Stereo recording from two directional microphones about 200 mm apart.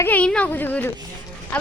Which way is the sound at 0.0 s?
5° left (ahead or behind).